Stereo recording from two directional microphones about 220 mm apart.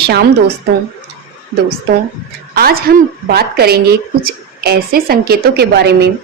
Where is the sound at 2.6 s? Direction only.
45° right (ahead or behind).